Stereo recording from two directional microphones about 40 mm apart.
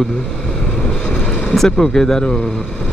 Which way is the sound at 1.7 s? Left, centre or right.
Centre.